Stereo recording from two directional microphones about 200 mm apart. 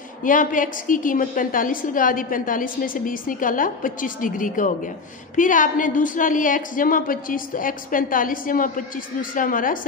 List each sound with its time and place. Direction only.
0.2 s a woman's voice: 40° left (ahead or behind)